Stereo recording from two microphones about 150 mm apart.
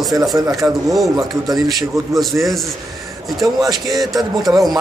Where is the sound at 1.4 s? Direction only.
25° right (ahead or behind).